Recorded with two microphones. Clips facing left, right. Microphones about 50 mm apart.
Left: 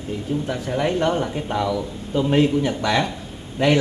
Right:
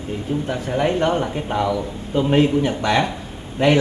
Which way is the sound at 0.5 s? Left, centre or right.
Right.